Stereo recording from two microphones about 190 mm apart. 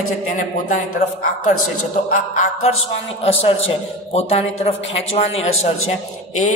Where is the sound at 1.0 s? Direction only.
35° left (ahead or behind).